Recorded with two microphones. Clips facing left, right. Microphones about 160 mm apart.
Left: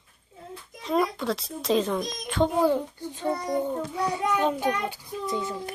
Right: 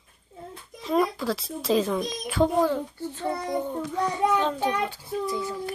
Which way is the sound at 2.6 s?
15° left (ahead or behind).